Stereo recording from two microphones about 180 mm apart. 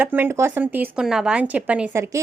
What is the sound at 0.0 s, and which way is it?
Speech, 10° right (ahead or behind).